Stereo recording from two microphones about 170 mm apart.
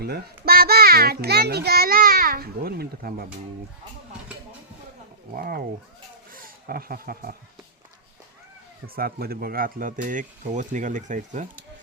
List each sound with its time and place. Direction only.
0.0 s a child's voice: 65° right (ahead or behind)
5.4 s a child's voice: 60° right (ahead or behind)
9.0 s speech: 60° right (ahead or behind); by 11.4 s 45° right (ahead or behind)